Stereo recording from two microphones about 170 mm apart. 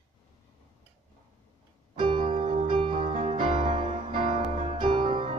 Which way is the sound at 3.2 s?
50° right (ahead or behind).